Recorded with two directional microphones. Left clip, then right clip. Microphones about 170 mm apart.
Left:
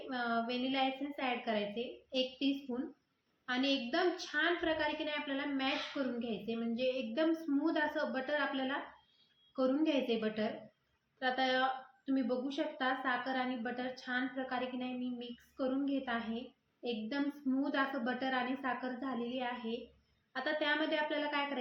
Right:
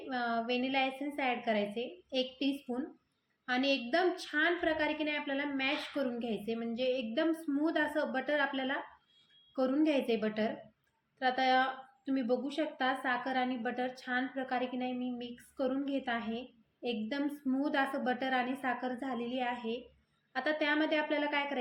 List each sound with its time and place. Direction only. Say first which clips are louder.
0.1 s a woman's voice: right 3 dB; 40° right (ahead or behind)